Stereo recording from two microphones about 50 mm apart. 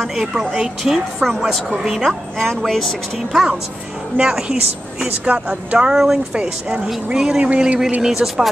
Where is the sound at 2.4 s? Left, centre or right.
Centre.